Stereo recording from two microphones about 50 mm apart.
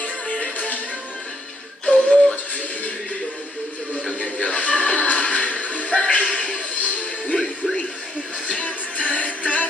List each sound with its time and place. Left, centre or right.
0.0 s music: left
1.9 s music: left
4.1 s music: left
8.5 s music: left